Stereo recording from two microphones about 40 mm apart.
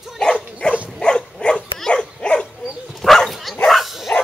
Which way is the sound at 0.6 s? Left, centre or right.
Left.